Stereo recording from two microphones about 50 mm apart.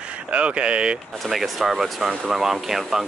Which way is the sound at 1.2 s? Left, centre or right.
Centre.